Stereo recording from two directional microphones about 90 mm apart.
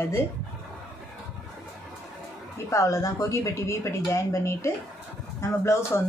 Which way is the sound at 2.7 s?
35° left (ahead or behind).